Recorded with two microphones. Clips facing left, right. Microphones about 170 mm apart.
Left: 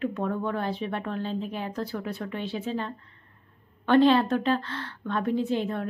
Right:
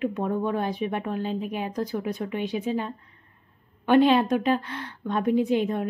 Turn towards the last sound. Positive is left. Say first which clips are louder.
# right 4 dB
turn(degrees=-15)  # may be behind; listen again after turning